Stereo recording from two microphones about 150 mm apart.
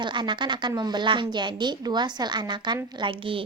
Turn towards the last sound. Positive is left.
turn(degrees=-30)  # may be behind; listen again after turning